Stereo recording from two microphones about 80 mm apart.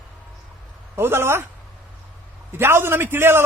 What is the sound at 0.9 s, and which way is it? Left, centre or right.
Speech, right.